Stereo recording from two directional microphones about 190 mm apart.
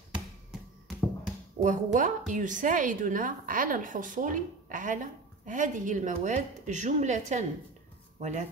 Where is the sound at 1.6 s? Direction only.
40° right (ahead or behind).